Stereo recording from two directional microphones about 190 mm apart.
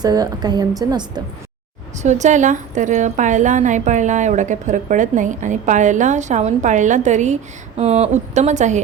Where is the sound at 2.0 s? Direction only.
40° right (ahead or behind).